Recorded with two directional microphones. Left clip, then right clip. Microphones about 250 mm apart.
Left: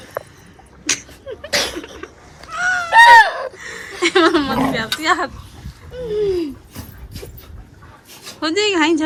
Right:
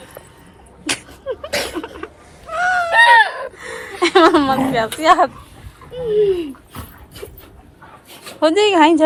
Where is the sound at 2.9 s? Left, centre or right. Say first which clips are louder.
Left 4 dB; left.